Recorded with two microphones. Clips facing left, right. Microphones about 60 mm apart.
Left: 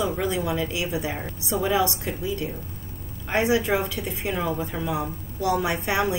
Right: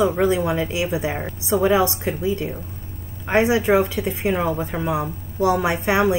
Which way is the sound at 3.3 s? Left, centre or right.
Right.